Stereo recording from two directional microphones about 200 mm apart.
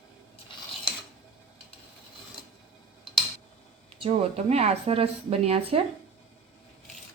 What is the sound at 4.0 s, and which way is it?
A woman's voice, 30° right (ahead or behind).